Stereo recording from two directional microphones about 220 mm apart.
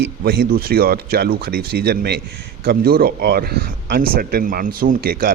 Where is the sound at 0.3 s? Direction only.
45° right (ahead or behind).